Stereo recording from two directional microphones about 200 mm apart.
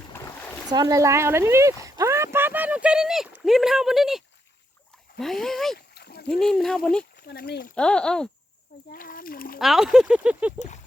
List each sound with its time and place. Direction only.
0.1 s a sound: 15° left (ahead or behind)
0.7 s speech: 20° right (ahead or behind); by 4.2 s centre (ahead or behind)
5.2 s speech: centre (ahead or behind)
5.7 s splash: 50° left (ahead or behind)
6.3 s speech: centre (ahead or behind)
7.3 s speech: 55° left (ahead or behind)
7.8 s speech: 5° left (ahead or behind)
8.9 s speech: 45° left (ahead or behind)
9.6 s speech: centre (ahead or behind)